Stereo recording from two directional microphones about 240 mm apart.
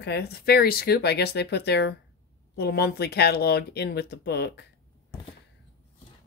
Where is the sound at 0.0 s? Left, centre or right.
Left.